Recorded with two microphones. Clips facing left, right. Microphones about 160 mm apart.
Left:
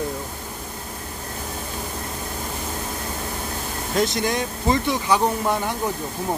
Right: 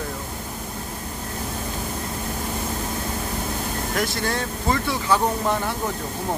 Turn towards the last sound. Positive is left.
turn(degrees=15)  # may be behind; listen again after turning